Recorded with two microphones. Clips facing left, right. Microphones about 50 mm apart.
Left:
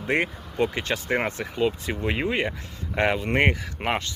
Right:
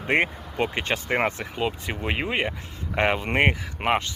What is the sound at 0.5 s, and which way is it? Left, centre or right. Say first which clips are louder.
Speech: left 3 dB; right.